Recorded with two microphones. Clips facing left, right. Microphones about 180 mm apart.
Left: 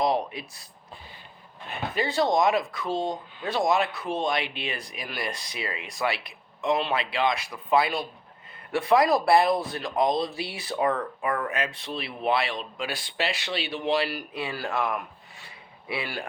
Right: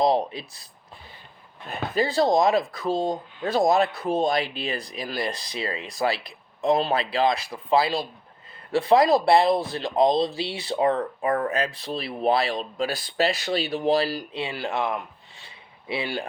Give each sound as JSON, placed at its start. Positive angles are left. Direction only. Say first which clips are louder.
{"t": 0.0, "sound": "speech", "louder": "right 4 dB", "side_deg": -30}
{"t": 1.7, "sound": "speech", "louder": "right 4 dB", "side_deg": -35}